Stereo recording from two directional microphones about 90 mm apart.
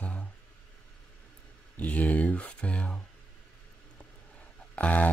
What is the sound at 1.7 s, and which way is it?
Mantra, 15° left (ahead or behind).